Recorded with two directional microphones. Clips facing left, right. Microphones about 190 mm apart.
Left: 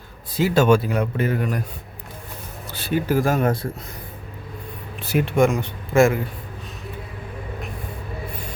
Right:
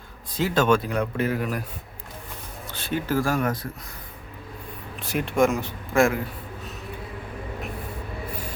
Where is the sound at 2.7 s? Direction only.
10° left (ahead or behind); by 3.7 s 30° left (ahead or behind).